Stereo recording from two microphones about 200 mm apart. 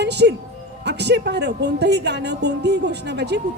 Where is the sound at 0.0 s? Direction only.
55° right (ahead or behind).